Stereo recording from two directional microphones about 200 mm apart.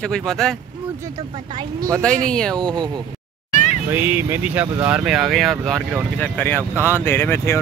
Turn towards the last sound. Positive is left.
turn(degrees=10)  # may be behind; listen again after turning